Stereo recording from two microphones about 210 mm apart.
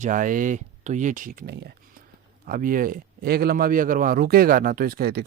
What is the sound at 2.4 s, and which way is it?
Speech, 40° right (ahead or behind).